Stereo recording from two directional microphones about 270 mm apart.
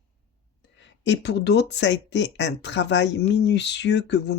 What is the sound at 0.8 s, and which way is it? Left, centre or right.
Speech, left.